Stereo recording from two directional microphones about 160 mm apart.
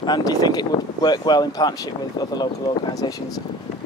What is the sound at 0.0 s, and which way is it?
Speech, 25° left (ahead or behind).